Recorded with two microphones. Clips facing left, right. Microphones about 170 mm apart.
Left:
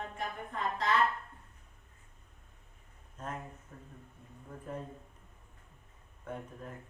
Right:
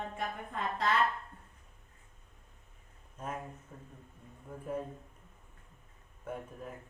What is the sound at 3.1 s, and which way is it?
Speech, 10° right (ahead or behind).